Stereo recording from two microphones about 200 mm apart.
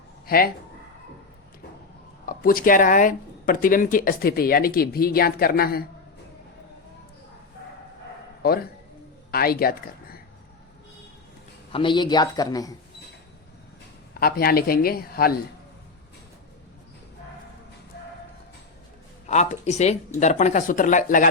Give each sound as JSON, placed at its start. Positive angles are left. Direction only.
{"t": 2.2, "sound": "speech", "side_deg": 45}
{"t": 8.4, "sound": "a woman's voice", "side_deg": 50}
{"t": 11.7, "sound": "a man's voice", "side_deg": 25}
{"t": 14.1, "sound": "speech", "side_deg": 50}
{"t": 19.3, "sound": "speech", "side_deg": 35}